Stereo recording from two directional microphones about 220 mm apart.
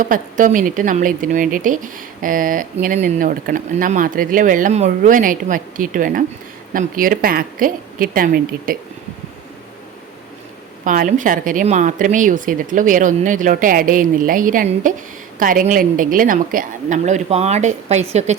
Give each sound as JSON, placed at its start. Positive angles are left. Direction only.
{"t": 0.0, "sound": "speech", "side_deg": -35}
{"t": 10.8, "sound": "speech", "side_deg": -35}